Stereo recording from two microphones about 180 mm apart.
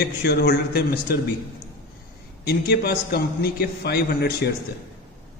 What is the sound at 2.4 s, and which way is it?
A man's voice, 60° left (ahead or behind).